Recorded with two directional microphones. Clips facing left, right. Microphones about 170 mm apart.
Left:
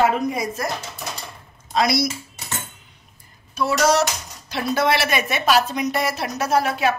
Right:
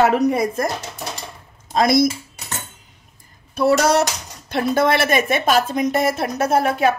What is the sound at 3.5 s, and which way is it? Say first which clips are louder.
A woman's voice: right 3 dB; 60° right (ahead or behind).